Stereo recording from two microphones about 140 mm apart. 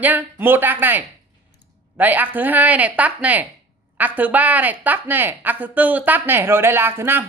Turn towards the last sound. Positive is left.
turn(degrees=-15)  # may be behind; listen again after turning